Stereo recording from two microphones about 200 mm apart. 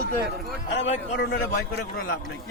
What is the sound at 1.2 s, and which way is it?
Speech, 50° left (ahead or behind).